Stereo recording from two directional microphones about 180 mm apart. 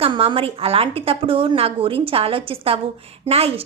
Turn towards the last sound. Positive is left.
turn(degrees=-35)  # may be behind; listen again after turning